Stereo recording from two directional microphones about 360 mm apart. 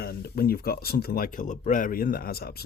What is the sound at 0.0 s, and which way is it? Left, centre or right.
Speech, left.